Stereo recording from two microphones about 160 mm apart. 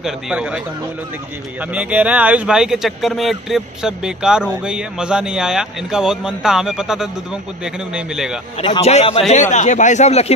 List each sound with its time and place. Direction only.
0.0 s a man's voice: 5° right (ahead or behind)
1.6 s a man's voice: 10° right (ahead or behind)
8.5 s speech: 35° left (ahead or behind)